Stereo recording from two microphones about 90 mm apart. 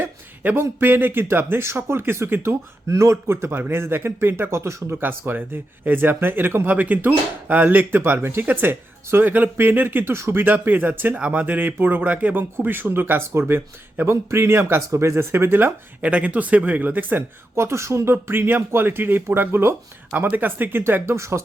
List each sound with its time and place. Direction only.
0.0 s speech: 25° right (ahead or behind)